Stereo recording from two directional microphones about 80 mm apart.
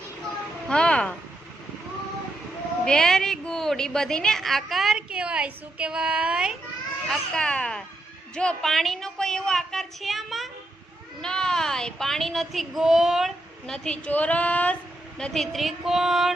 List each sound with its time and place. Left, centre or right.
0.7 s speech: centre
2.8 s speech: centre
4.9 s a woman's voice: centre
7.1 s a woman's voice: centre
13.7 s a woman's voice: centre
15.2 s speech: centre